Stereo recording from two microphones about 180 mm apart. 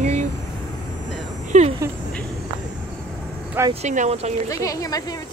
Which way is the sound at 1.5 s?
40° right (ahead or behind).